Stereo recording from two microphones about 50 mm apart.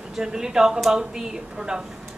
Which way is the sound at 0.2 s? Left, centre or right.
Centre.